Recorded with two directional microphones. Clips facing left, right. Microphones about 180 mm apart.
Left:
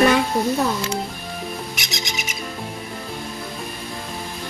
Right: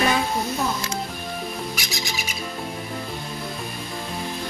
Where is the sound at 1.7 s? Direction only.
20° left (ahead or behind).